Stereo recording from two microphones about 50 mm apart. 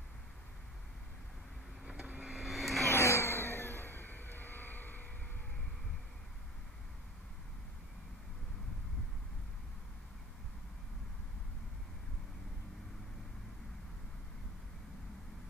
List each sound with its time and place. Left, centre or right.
1.9 s vehicle: centre
2.3 s vehicle: centre
2.9 s vehicle: left